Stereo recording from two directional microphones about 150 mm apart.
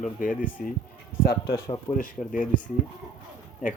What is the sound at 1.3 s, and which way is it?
Speech, 20° left (ahead or behind).